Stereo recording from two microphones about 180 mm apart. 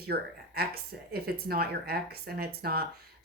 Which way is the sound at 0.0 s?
60° right (ahead or behind).